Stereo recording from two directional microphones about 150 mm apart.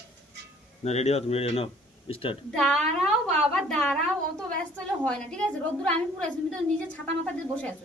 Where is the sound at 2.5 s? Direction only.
5° left (ahead or behind).